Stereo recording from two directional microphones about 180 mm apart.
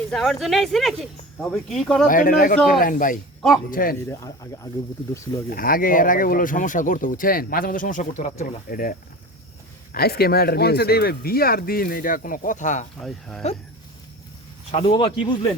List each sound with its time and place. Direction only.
0.1 s speech: centre (ahead or behind)
2.0 s speech: 50° left (ahead or behind)
4.0 s speech: 15° left (ahead or behind)
5.5 s speech: 55° left (ahead or behind)
13.0 s speech: centre (ahead or behind)
14.7 s speech: 30° left (ahead or behind)